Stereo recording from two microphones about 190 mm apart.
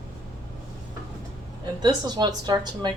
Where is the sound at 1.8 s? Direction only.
20° right (ahead or behind).